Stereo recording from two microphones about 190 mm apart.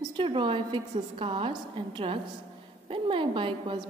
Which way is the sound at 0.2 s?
25° right (ahead or behind).